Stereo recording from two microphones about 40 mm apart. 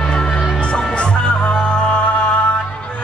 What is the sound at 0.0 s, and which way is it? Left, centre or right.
Music, centre.